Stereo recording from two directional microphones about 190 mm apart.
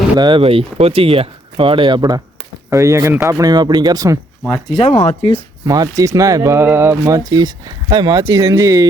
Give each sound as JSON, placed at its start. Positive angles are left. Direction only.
{"t": 0.2, "sound": "speech", "side_deg": -25}
{"t": 4.8, "sound": "speech", "side_deg": 35}
{"t": 5.6, "sound": "speech", "side_deg": -20}